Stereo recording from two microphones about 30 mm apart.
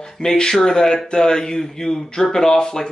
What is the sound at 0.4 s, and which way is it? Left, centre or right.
Speech, left.